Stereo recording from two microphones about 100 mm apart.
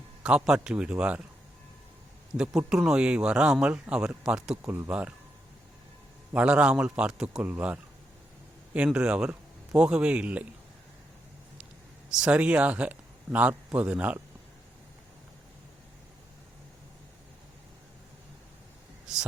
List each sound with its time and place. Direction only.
0.2 s speech: 10° right (ahead or behind)
2.4 s speech: 10° right (ahead or behind)
4.5 s speech: 20° right (ahead or behind)
6.3 s speech: 10° right (ahead or behind)
12.1 s speech: 10° right (ahead or behind)